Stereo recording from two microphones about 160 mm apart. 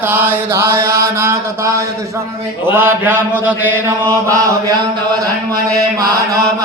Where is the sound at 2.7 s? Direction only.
15° right (ahead or behind).